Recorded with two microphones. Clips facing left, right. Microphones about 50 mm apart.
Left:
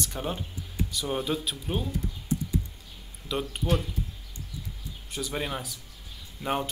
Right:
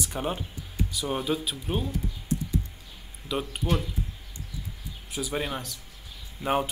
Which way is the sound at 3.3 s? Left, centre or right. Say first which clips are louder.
Even; centre.